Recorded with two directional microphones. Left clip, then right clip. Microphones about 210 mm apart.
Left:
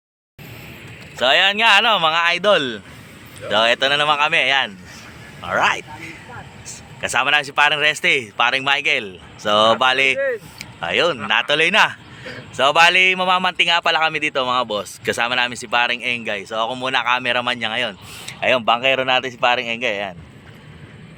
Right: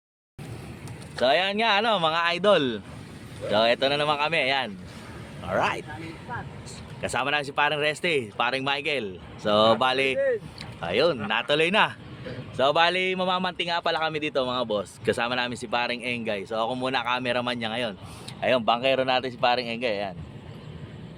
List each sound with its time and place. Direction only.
1.1 s a man's voice: centre (ahead or behind)
10.6 s a sound: centre (ahead or behind)
11.3 s a man's voice: centre (ahead or behind)
18.3 s speech: 15° left (ahead or behind)